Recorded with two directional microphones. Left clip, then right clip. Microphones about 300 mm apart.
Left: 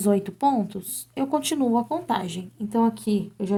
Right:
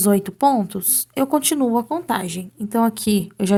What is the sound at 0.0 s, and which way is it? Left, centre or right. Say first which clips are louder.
Speech: right 5 dB; centre.